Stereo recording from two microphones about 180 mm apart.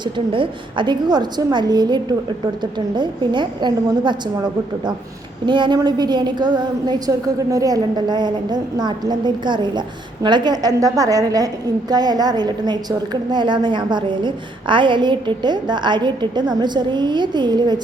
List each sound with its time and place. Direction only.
0.0 s a woman's voice: 25° right (ahead or behind)
5.5 s a woman's voice: 25° right (ahead or behind)